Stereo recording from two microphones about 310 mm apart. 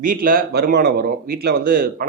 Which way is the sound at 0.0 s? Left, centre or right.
Right.